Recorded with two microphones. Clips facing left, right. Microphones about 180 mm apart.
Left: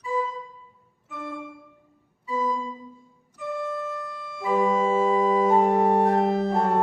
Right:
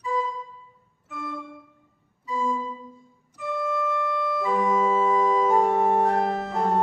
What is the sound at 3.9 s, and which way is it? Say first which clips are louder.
Organ: right 9 dB; 90° right.